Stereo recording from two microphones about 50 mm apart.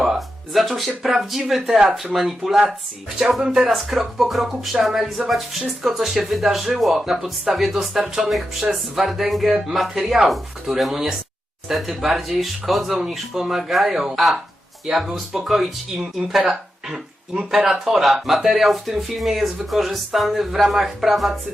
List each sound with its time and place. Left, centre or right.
0.0 s music: centre
1.0 s speech: centre
17.6 s speech: centre
18.0 s speech: centre